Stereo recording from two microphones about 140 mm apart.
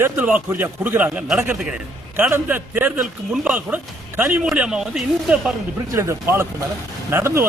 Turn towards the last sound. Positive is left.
turn(degrees=-20)  # may be behind; listen again after turning